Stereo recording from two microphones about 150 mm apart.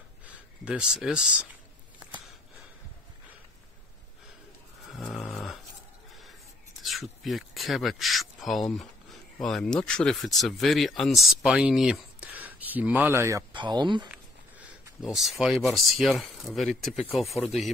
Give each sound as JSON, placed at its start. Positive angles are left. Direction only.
{"t": 0.3, "sound": "speech", "side_deg": -5}
{"t": 4.9, "sound": "a sound", "side_deg": 0}
{"t": 6.8, "sound": "speech", "side_deg": 0}
{"t": 13.5, "sound": "speech", "side_deg": -30}
{"t": 15.0, "sound": "speech", "side_deg": 0}